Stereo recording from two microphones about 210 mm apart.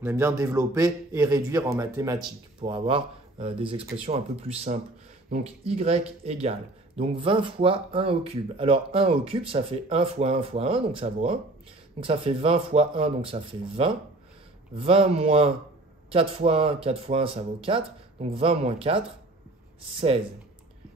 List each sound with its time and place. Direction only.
0.0 s a man's voice: 10° right (ahead or behind)
2.6 s speech: 25° right (ahead or behind)